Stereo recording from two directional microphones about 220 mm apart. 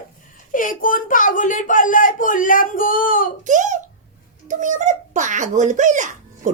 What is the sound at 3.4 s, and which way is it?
A child's voice, 35° right (ahead or behind).